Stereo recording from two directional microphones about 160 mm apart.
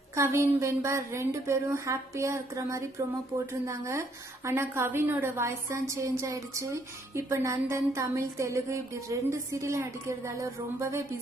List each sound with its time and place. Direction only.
0.1 s a woman's voice: 15° right (ahead or behind)